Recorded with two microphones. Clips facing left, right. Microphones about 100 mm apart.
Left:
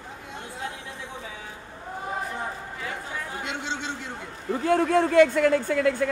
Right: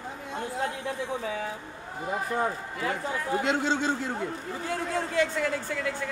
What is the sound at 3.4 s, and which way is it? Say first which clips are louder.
Speech: right 7 dB; 40° right (ahead or behind).